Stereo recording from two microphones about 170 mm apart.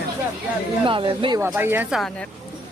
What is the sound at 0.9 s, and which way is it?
Speech, 30° right (ahead or behind).